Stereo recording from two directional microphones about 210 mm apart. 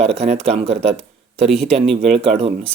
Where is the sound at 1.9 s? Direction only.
30° right (ahead or behind).